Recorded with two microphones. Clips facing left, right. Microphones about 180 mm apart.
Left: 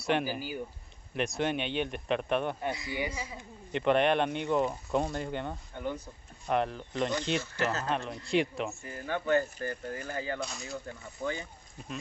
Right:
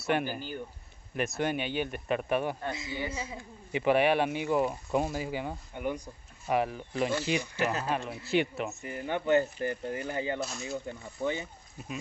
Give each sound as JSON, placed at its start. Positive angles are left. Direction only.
{"t": 0.0, "sound": "speech", "side_deg": 0}
{"t": 1.1, "sound": "speech", "side_deg": -5}
{"t": 2.7, "sound": "speech", "side_deg": -25}
{"t": 3.7, "sound": "speech", "side_deg": -5}
{"t": 8.8, "sound": "speech", "side_deg": -20}
{"t": 10.4, "sound": "speech", "side_deg": 0}